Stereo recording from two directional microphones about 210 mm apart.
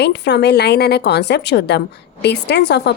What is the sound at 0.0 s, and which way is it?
A woman's voice, 55° left (ahead or behind).